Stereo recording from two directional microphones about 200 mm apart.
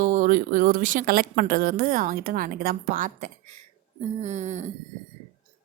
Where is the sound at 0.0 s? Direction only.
40° right (ahead or behind).